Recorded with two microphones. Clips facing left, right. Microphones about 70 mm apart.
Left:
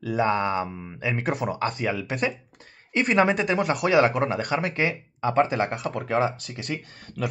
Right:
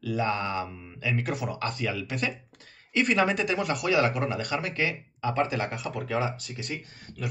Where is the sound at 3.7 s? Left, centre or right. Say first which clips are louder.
Left 6 dB; left.